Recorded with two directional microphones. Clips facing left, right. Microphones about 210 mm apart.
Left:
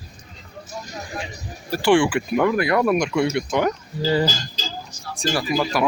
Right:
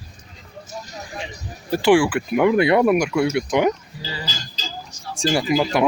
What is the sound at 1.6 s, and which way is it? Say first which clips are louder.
Speech: right 3 dB; 20° right (ahead or behind).